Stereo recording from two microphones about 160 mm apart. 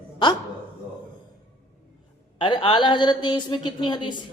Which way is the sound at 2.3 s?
30° left (ahead or behind).